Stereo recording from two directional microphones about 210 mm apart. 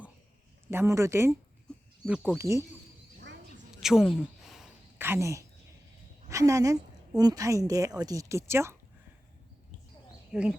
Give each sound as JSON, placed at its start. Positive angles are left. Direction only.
{"t": 0.7, "sound": "speech", "side_deg": -10}
{"t": 1.7, "sound": "a sound", "side_deg": 5}
{"t": 2.0, "sound": "speech", "side_deg": -5}
{"t": 3.8, "sound": "a sound", "side_deg": 0}
{"t": 6.2, "sound": "a woman's voice", "side_deg": -15}
{"t": 10.3, "sound": "speech", "side_deg": 0}